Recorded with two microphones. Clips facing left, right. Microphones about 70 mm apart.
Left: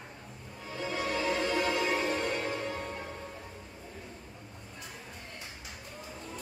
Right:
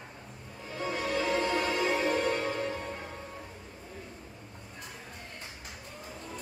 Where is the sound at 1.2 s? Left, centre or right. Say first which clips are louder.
Right 1 dB; right.